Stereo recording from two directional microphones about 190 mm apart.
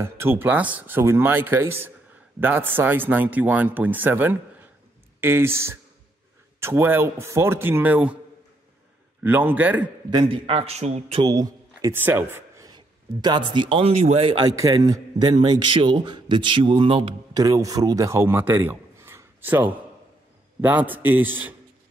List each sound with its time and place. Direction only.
0.0 s speech: 10° right (ahead or behind)
9.2 s speech: 10° right (ahead or behind)
10.0 s a man's voice: 25° right (ahead or behind)
11.2 s a man's voice: 20° right (ahead or behind)